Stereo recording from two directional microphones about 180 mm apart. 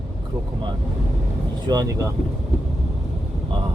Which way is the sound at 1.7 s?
20° right (ahead or behind).